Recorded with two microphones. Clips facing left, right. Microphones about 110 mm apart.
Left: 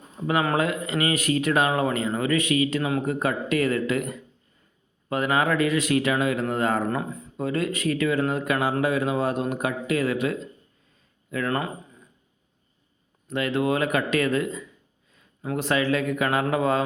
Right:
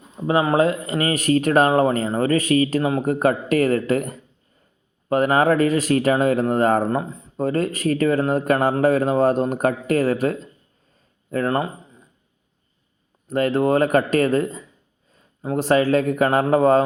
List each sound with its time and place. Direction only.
0.3 s speech: 30° right (ahead or behind)
6.8 s speech: 25° right (ahead or behind)
7.3 s speech: 40° right (ahead or behind)
13.2 s a man's voice: 40° right (ahead or behind)